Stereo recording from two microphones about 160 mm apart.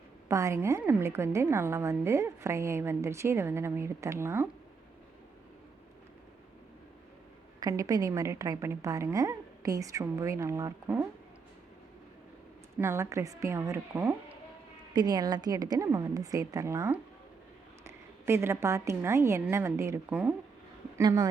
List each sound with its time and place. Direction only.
0.3 s a woman's voice: 20° right (ahead or behind)
7.6 s a woman's voice: 20° right (ahead or behind)
12.8 s a woman's voice: 15° right (ahead or behind)
14.9 s a woman's voice: 25° right (ahead or behind)